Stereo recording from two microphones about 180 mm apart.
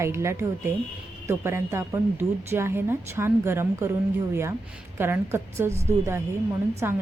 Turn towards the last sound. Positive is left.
turn(degrees=-10)  # may be behind; listen again after turning